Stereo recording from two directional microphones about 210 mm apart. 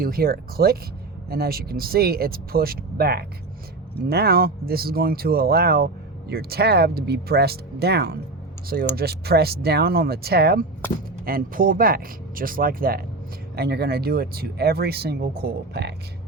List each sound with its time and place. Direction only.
0.0 s speech: 45° right (ahead or behind)